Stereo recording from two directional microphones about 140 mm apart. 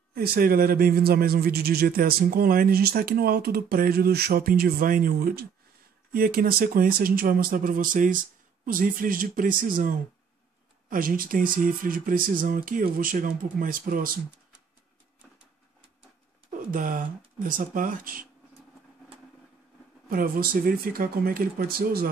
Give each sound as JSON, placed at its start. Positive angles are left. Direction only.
{"t": 0.1, "sound": "speech", "side_deg": -90}
{"t": 10.9, "sound": "speech", "side_deg": -90}
{"t": 16.4, "sound": "speech", "side_deg": -70}
{"t": 20.1, "sound": "speech", "side_deg": -90}